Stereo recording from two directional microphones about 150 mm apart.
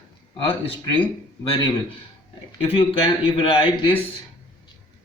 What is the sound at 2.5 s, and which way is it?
Speech, 35° left (ahead or behind).